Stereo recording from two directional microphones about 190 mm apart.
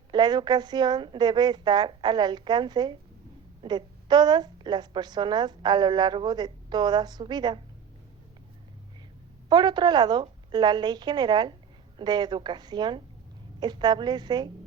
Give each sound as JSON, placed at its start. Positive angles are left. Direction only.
{"t": 0.1, "sound": "a woman's voice", "side_deg": -20}
{"t": 9.5, "sound": "a woman's voice", "side_deg": -20}